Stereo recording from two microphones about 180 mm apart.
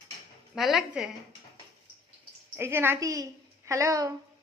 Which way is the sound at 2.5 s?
10° right (ahead or behind).